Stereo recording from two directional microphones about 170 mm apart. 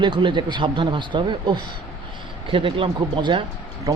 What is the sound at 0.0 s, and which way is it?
Speech, 30° right (ahead or behind).